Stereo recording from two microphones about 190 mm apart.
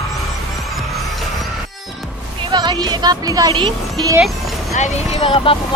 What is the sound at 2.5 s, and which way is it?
Speech, 25° right (ahead or behind).